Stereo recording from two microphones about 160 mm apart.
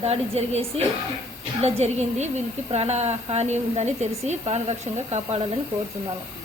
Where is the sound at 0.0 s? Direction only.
40° right (ahead or behind).